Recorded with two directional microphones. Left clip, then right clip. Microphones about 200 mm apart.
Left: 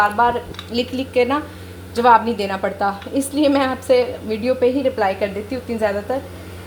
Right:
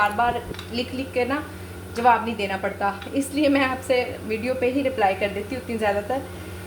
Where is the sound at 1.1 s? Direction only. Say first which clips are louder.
Left 7 dB; 35° left (ahead or behind).